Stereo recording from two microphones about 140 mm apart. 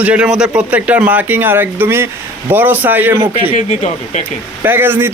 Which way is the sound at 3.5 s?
55° left (ahead or behind).